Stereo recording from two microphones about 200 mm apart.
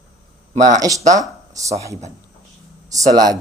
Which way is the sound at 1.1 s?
15° right (ahead or behind).